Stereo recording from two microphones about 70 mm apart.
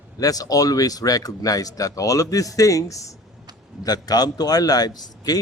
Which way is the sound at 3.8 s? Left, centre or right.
Left.